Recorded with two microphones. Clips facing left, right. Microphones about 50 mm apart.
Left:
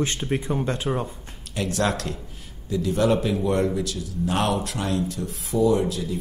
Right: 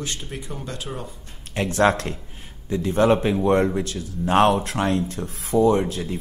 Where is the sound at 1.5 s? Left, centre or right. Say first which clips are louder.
Right 5 dB; right.